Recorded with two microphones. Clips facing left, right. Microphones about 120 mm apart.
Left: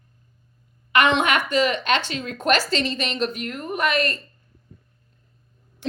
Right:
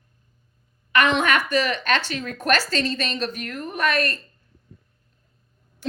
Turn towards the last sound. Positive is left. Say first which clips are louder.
# left 1 dB
turn(degrees=15)  # may be behind; listen again after turning